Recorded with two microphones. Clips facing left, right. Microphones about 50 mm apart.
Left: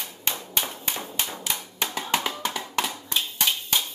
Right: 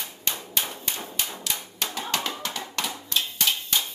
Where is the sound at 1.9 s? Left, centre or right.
Centre.